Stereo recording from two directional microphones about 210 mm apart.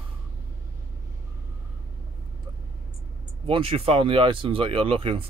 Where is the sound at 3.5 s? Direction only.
25° right (ahead or behind).